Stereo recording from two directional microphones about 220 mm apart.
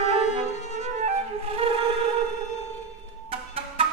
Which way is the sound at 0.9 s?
30° right (ahead or behind).